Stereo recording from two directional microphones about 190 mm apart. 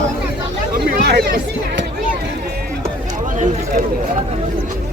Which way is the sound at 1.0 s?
55° right (ahead or behind).